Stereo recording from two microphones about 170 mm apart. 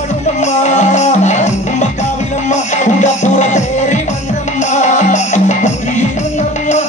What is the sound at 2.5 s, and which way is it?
Music, 45° left (ahead or behind).